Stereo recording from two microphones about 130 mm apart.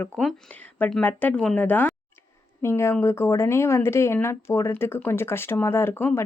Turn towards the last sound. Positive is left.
turn(degrees=15)  # may be behind; listen again after turning